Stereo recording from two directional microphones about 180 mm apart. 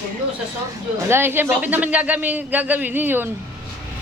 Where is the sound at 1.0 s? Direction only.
10° right (ahead or behind).